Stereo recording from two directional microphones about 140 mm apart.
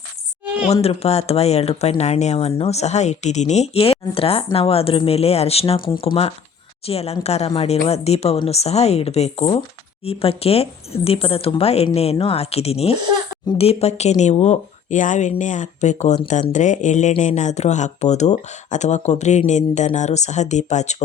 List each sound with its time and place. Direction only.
0.7 s speech: 45° left (ahead or behind)
6.8 s speech: 45° left (ahead or behind)